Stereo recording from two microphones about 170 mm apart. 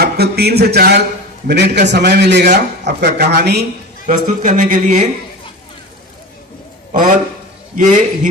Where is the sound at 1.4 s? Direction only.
85° right.